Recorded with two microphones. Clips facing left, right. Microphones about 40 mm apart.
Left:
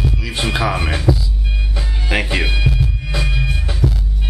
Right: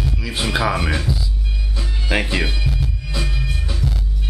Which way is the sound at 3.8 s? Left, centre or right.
Left.